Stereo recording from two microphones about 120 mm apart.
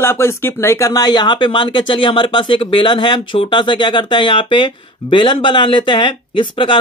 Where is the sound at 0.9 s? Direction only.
35° left (ahead or behind).